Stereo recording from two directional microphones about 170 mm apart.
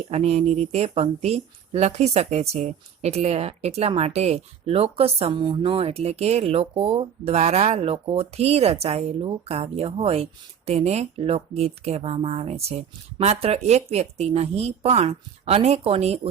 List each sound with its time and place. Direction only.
0.1 s speech: 40° right (ahead or behind)